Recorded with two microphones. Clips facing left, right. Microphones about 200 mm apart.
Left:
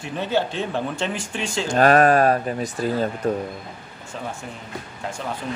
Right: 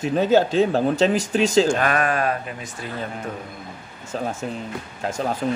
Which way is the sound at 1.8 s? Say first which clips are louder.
Left 6 dB; 40° left (ahead or behind).